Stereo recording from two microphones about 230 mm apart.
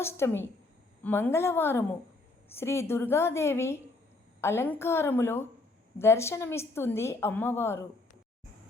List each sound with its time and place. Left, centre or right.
0.0 s a woman's voice: centre